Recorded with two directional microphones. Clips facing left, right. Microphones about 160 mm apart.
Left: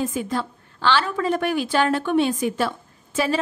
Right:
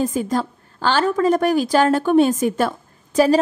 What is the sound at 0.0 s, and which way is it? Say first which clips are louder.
A woman's voice: right 4 dB; 40° right (ahead or behind).